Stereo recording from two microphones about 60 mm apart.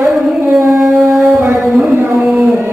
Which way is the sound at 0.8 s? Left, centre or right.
Centre.